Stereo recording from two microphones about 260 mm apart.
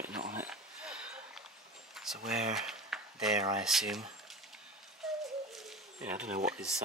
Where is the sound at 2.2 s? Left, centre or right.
Centre.